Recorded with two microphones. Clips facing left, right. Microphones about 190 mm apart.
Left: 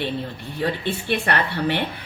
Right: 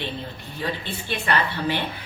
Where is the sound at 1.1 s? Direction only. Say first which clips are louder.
Left 1 dB; 65° left (ahead or behind).